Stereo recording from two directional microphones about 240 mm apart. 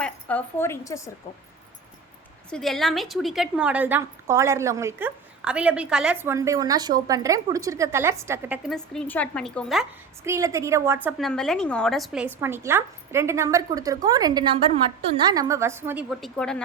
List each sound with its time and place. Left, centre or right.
0.0 s a woman's voice: centre
2.5 s a woman's voice: centre
10.2 s a woman's voice: centre
11.3 s a woman's voice: centre